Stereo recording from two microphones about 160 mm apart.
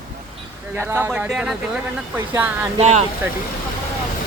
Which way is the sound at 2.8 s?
40° right (ahead or behind).